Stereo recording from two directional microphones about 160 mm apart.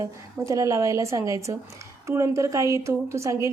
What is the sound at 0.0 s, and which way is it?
A woman's voice, 20° right (ahead or behind).